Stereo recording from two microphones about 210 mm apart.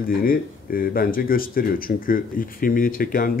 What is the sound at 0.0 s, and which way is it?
Speech, 45° left (ahead or behind).